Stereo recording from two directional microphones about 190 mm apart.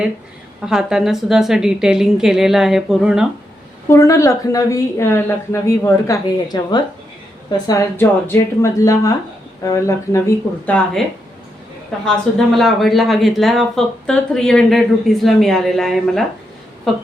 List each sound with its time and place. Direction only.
0.6 s speech: 5° right (ahead or behind)
3.8 s speech: 15° left (ahead or behind)
12.5 s speech: centre (ahead or behind)